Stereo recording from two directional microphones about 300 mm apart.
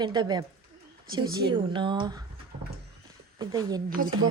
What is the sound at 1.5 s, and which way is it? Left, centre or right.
Speech, centre.